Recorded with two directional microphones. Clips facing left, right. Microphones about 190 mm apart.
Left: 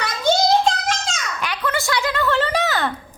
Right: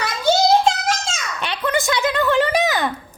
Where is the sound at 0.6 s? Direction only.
5° right (ahead or behind).